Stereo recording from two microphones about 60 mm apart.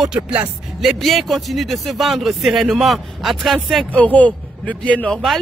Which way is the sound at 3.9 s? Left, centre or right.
Left.